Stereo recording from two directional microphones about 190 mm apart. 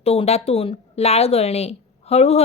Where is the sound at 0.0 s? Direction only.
30° left (ahead or behind).